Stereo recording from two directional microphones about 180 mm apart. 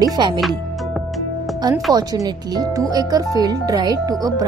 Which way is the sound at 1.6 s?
20° right (ahead or behind).